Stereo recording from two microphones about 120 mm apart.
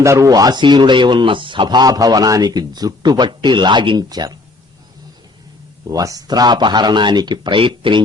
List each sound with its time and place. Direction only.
0.0 s speech: 25° right (ahead or behind)
5.9 s speech: 30° right (ahead or behind); by 8.0 s 45° right (ahead or behind)